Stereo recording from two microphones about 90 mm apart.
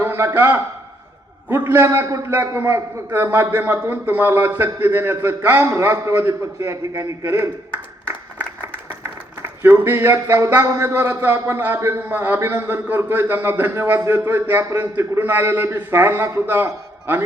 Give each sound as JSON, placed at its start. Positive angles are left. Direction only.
{"t": 0.0, "sound": "a man's voice", "side_deg": -30}
{"t": 9.4, "sound": "a man's voice", "side_deg": -25}